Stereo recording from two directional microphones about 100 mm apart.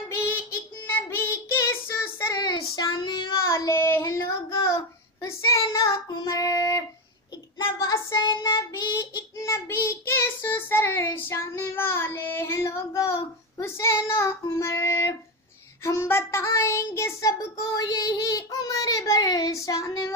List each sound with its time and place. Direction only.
0.8 s child singing: 25° left (ahead or behind)
2.3 s child singing: 45° left (ahead or behind)
3.4 s child singing: 30° left (ahead or behind)
7.5 s child singing: 45° left (ahead or behind)
9.4 s child singing: 30° left (ahead or behind)